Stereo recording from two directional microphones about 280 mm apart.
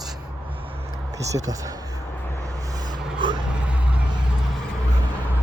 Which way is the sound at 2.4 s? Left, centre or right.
Centre.